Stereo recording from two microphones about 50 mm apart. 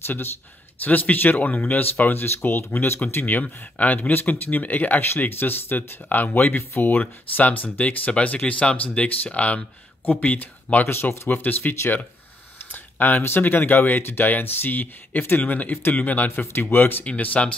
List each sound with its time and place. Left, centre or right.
0.0 s speech: left
0.7 s speech: left
2.2 s speech: left
10.9 s speech: left
11.2 s speech: left
12.7 s a sound: left
13.2 s speech: left
17.0 s speech: left